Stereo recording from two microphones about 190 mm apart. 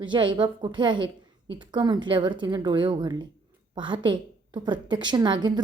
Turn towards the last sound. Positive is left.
turn(degrees=-20)  # may be behind; listen again after turning